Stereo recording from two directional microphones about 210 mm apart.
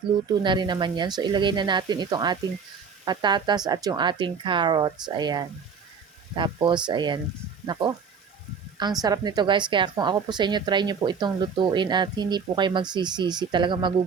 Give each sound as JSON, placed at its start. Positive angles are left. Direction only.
{"t": 0.4, "sound": "a woman's voice", "side_deg": -20}
{"t": 9.0, "sound": "a woman's voice", "side_deg": -20}